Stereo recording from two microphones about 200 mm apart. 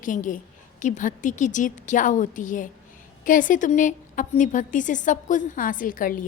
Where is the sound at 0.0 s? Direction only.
40° left (ahead or behind).